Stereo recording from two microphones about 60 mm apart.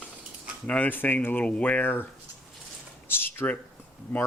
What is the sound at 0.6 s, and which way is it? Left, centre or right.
Speech, left.